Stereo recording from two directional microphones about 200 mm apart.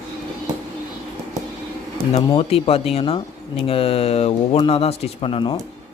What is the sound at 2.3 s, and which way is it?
Speech, 30° left (ahead or behind).